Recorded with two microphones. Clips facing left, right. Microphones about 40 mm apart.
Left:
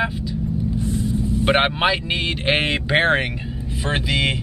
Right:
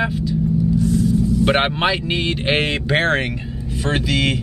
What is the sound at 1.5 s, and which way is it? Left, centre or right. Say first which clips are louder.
Speech: left 3 dB; centre.